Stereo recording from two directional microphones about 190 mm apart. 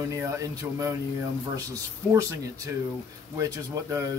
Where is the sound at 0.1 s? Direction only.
15° right (ahead or behind).